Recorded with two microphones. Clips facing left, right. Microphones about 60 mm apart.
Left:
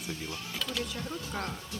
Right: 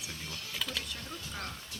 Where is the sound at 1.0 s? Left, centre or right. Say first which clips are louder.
Left 6 dB; left.